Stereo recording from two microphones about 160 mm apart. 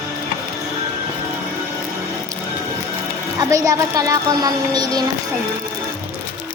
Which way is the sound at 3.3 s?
20° right (ahead or behind).